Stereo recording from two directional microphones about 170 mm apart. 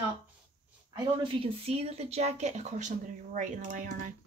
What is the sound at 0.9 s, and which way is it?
Speech, 30° right (ahead or behind).